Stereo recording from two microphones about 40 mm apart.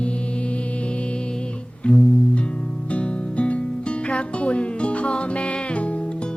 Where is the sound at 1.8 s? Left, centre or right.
Left.